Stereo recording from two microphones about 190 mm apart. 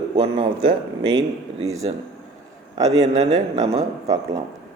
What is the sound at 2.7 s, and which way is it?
A man's voice, 20° right (ahead or behind).